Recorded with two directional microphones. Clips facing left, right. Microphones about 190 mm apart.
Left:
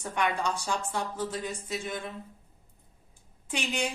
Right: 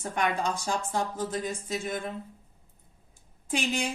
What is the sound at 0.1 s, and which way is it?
Speech, 40° right (ahead or behind).